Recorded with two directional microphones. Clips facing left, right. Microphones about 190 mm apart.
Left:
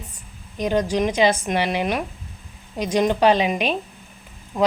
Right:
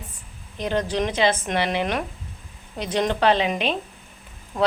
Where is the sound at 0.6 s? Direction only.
15° left (ahead or behind).